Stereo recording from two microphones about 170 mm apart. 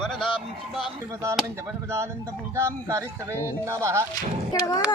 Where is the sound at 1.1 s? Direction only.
15° right (ahead or behind).